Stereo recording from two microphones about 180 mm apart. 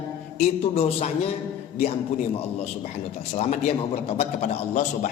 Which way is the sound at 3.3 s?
40° left (ahead or behind).